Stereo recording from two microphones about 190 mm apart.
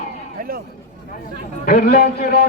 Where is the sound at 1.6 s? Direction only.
55° left (ahead or behind).